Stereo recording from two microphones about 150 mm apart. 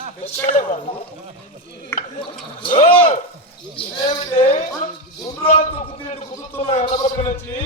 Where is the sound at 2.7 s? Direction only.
45° left (ahead or behind).